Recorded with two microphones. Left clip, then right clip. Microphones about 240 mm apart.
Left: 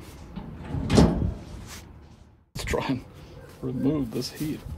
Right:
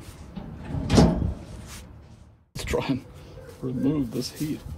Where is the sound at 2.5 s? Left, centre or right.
Left.